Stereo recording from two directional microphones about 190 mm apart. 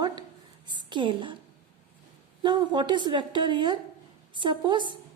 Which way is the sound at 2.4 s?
25° right (ahead or behind).